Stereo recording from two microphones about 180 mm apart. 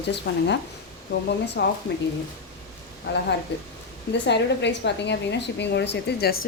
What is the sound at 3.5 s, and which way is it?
A woman's voice, 75° left (ahead or behind).